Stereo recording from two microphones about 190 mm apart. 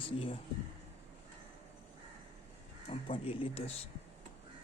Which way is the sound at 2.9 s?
30° left (ahead or behind).